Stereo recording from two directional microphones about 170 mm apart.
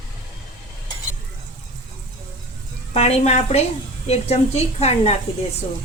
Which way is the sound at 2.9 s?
40° left (ahead or behind).